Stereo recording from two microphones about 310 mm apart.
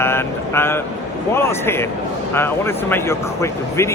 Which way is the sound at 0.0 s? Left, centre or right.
Centre.